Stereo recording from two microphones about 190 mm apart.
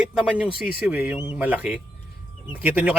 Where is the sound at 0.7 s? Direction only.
5° right (ahead or behind).